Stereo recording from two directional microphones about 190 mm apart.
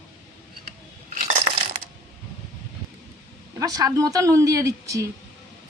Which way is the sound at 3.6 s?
20° right (ahead or behind).